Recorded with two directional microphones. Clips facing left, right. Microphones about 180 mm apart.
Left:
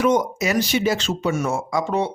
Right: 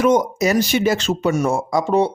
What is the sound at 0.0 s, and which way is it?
Speech, 40° right (ahead or behind).